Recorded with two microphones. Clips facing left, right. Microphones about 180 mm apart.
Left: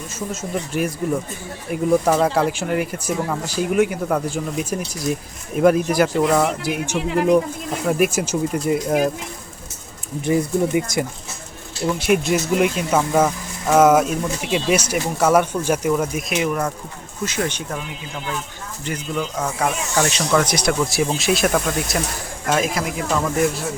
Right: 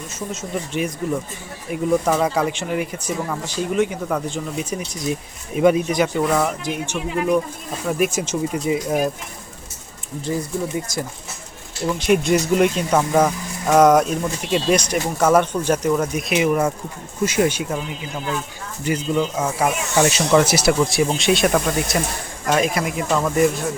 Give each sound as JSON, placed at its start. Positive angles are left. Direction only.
{"t": 0.2, "sound": "speech", "side_deg": 5}
{"t": 6.9, "sound": "speech", "side_deg": 75}
{"t": 7.9, "sound": "speech", "side_deg": 5}
{"t": 10.2, "sound": "speech", "side_deg": 15}
{"t": 11.9, "sound": "speech", "side_deg": 5}